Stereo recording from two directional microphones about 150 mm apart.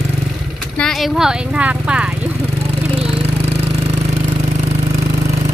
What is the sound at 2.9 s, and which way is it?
Jackhammer, 40° right (ahead or behind).